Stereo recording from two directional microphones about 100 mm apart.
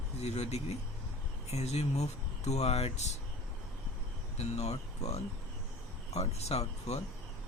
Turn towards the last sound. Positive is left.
turn(degrees=90)